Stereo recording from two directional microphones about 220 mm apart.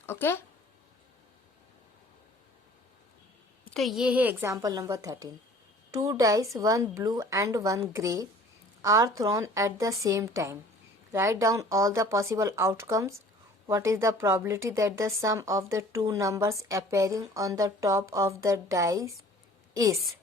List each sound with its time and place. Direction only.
0.0 s speech: 10° left (ahead or behind)
3.8 s a woman's voice: centre (ahead or behind)